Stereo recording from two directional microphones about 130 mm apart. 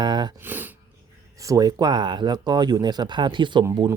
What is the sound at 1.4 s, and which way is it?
Speech, 25° right (ahead or behind).